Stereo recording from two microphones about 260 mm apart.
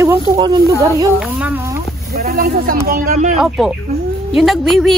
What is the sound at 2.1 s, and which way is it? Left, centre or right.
Speech, right.